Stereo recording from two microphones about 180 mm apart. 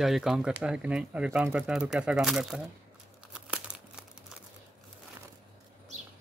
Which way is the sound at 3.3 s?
5° right (ahead or behind).